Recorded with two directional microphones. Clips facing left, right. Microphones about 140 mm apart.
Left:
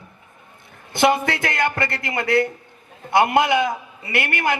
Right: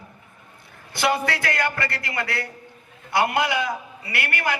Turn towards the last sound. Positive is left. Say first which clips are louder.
# left 4 dB
turn(degrees=20)  # may be behind; listen again after turning